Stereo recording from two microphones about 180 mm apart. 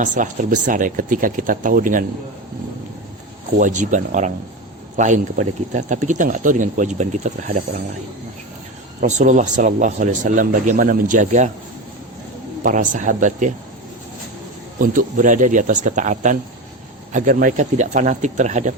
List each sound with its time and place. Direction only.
0.0 s speech: 45° right (ahead or behind)
3.6 s speech: 45° right (ahead or behind)
9.0 s speech: 40° right (ahead or behind)
12.6 s speech: 45° right (ahead or behind)
14.8 s speech: 45° right (ahead or behind)